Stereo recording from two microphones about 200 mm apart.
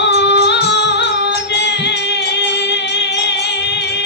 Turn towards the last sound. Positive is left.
turn(degrees=60)  # may be behind; listen again after turning